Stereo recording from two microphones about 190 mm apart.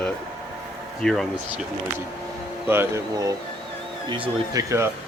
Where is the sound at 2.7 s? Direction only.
15° right (ahead or behind).